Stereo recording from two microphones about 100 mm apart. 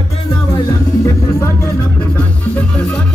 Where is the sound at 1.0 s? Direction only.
25° left (ahead or behind).